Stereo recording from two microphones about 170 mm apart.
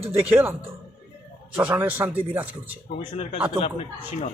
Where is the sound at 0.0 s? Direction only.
35° right (ahead or behind).